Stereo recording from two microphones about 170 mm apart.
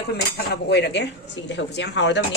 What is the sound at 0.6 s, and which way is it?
Speech, 90° left.